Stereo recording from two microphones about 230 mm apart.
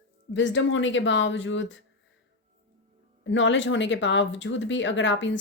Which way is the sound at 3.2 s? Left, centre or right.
Left.